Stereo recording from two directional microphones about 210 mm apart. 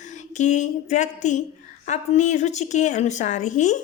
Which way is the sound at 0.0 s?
35° left (ahead or behind).